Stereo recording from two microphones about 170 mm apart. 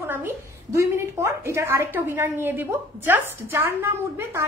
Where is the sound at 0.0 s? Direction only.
10° right (ahead or behind).